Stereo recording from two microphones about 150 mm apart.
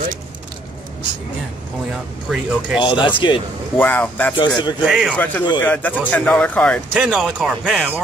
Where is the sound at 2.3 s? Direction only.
5° right (ahead or behind).